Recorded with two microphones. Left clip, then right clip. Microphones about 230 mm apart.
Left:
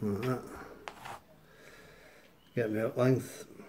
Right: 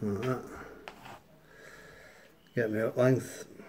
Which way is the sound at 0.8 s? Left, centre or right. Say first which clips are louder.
Left 3 dB; left.